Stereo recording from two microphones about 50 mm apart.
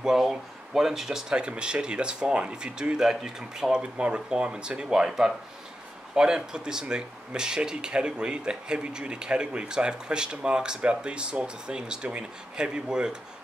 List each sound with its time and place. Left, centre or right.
0.0 s speech: centre
1.3 s speech: centre